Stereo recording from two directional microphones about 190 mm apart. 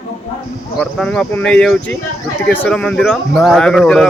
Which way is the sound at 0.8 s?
5° left (ahead or behind).